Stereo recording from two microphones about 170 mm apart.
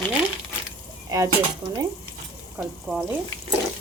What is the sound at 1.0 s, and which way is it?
Dishes, 20° right (ahead or behind).